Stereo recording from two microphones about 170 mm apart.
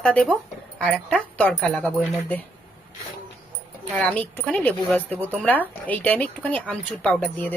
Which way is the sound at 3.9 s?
10° left (ahead or behind).